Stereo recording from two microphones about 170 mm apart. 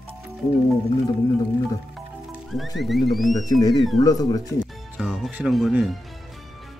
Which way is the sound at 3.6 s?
25° left (ahead or behind).